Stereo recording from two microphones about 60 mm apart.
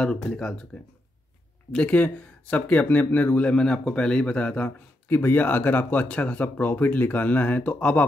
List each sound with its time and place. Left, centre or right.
0.0 s speech: centre
1.7 s speech: left
3.5 s speech: centre
5.0 s speech: left